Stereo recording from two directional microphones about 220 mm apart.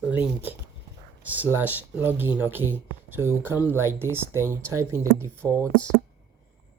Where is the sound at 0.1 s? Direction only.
5° right (ahead or behind).